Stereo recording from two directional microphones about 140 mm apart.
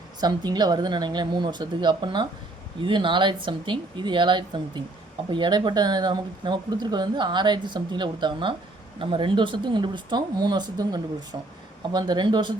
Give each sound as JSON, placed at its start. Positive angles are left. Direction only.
{"t": 0.2, "sound": "speech", "side_deg": -30}